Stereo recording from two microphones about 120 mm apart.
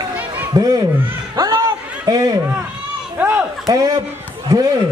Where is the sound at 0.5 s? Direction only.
30° right (ahead or behind).